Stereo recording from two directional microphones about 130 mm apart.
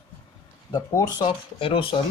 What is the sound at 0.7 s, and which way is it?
Speech, 30° left (ahead or behind).